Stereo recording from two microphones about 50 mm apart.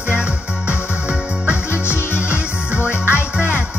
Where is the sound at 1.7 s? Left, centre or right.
Left.